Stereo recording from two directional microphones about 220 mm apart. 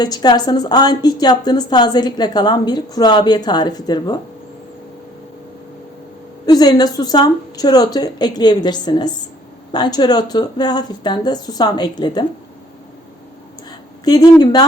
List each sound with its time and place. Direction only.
0.0 s a woman's voice: 20° left (ahead or behind)
6.4 s a woman's voice: 20° left (ahead or behind)
13.7 s a sound: 20° left (ahead or behind)